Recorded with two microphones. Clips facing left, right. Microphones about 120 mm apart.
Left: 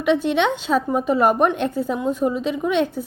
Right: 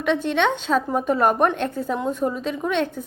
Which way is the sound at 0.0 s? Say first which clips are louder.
Left 2 dB; 10° left (ahead or behind).